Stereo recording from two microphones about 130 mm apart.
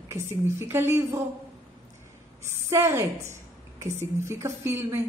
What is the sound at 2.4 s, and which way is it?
A woman's voice, 20° right (ahead or behind).